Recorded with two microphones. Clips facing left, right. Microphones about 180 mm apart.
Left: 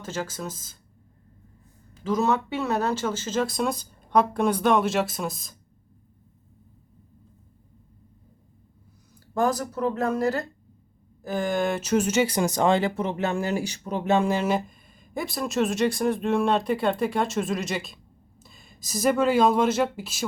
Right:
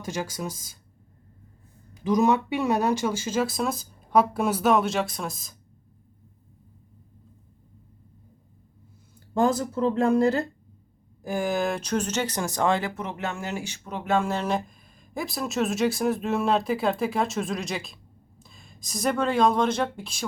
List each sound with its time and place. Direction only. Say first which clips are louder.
0.0 s speech: right 1 dB; 10° right (ahead or behind)
1.9 s speech: right 2 dB; 15° right (ahead or behind); by 5.5 s centre (ahead or behind)
9.3 s speech: right 2 dB; 25° right (ahead or behind)
11.2 s speech: left 1 dB; 10° right (ahead or behind); by 14.3 s 20° left (ahead or behind)
14.3 s speech: left 2 dB; 5° left (ahead or behind)